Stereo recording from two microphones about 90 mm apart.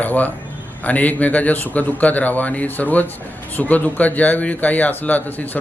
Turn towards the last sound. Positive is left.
turn(degrees=20)  # may be behind; listen again after turning